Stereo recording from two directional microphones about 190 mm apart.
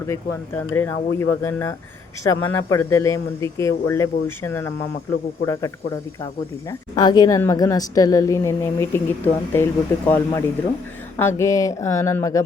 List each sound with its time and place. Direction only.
0.1 s a woman's voice: 10° left (ahead or behind)